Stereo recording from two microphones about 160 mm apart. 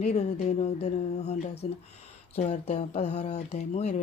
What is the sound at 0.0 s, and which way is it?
Speech, 45° left (ahead or behind).